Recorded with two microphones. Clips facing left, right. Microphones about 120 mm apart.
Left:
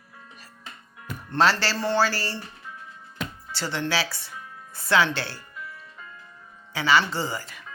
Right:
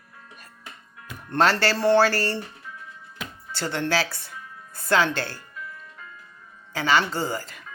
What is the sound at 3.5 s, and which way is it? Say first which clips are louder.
Speech: right 3 dB; 50° right (ahead or behind).